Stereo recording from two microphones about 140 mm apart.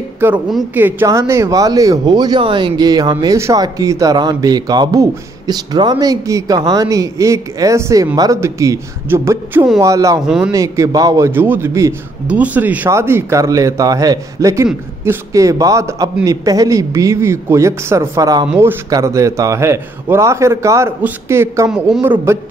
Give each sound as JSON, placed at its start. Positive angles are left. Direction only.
{"t": 0.7, "sound": "a man's voice", "side_deg": -15}
{"t": 10.2, "sound": "a man's voice", "side_deg": -5}
{"t": 10.5, "sound": "speech", "side_deg": -25}
{"t": 18.5, "sound": "a man's voice", "side_deg": -15}
{"t": 21.6, "sound": "a man's voice", "side_deg": -5}